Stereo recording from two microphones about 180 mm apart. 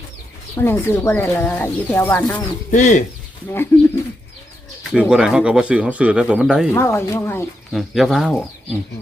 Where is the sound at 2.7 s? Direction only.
45° left (ahead or behind).